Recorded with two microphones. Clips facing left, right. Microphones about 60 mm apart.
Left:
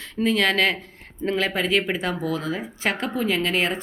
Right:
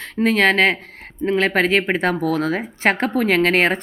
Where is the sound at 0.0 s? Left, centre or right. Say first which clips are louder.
Right 5 dB; right.